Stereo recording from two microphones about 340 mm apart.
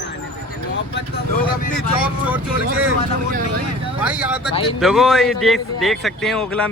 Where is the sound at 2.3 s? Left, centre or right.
Centre.